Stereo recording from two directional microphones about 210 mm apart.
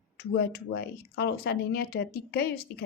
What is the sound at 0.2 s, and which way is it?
Speech, 50° left (ahead or behind).